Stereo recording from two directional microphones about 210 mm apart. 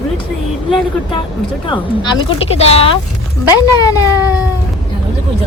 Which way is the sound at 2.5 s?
30° left (ahead or behind).